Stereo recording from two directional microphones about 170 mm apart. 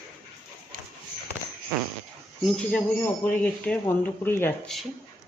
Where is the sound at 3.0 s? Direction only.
10° left (ahead or behind).